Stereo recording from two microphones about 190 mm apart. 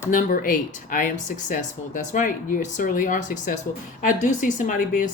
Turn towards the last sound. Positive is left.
turn(degrees=45)  # may be behind; listen again after turning